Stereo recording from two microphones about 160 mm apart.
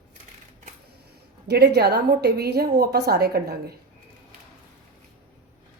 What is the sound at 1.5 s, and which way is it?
A woman's voice, 90° right.